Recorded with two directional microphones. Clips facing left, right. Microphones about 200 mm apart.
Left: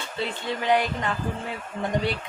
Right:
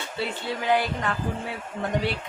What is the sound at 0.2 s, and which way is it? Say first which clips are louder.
A woman's voice: left 1 dB; 5° right (ahead or behind).